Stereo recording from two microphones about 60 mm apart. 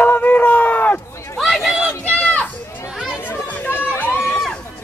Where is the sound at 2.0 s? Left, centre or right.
Left.